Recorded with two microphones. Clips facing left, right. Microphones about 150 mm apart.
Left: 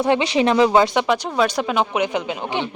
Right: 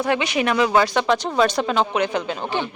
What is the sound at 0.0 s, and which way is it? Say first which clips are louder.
Speech: left 4 dB; 25° left (ahead or behind).